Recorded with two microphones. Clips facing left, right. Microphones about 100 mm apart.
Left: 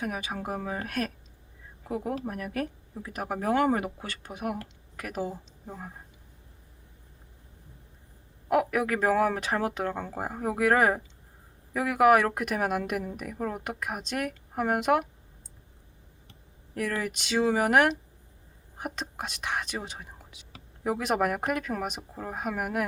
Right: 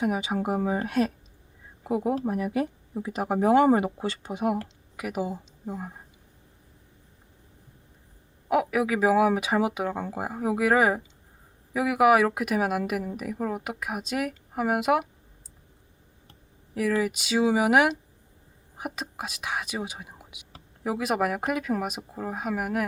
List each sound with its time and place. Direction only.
0.0 s speech: 20° right (ahead or behind)
4.9 s speech: 10° right (ahead or behind)
8.4 s a woman's voice: centre (ahead or behind)
16.7 s a woman's voice: 5° right (ahead or behind)
20.8 s a woman's voice: 5° right (ahead or behind)